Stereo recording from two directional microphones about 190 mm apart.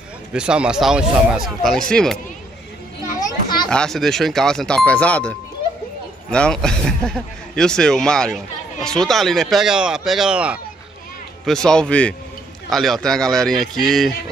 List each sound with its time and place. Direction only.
0.3 s speech: 5° right (ahead or behind)
3.2 s children playing: 20° left (ahead or behind)
3.6 s speech: 5° left (ahead or behind)
6.3 s speech: 5° left (ahead or behind)